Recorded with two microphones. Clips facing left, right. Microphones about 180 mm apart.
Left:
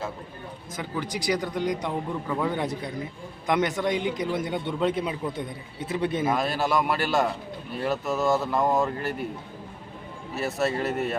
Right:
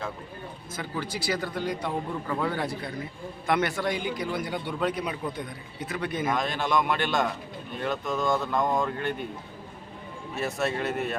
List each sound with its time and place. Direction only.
0.8 s a man's voice: 15° left (ahead or behind)
6.3 s a man's voice: 5° left (ahead or behind)
10.3 s speech: centre (ahead or behind)